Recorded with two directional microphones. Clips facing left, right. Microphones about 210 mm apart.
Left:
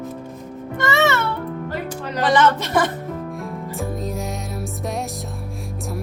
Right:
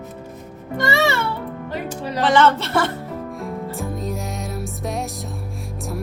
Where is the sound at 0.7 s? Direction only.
35° right (ahead or behind).